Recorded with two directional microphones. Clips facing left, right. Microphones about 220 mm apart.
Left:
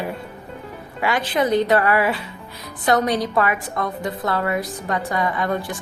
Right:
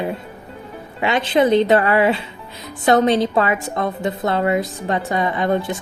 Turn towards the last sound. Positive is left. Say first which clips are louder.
# right 4 dB
turn(degrees=-25)  # may be behind; listen again after turning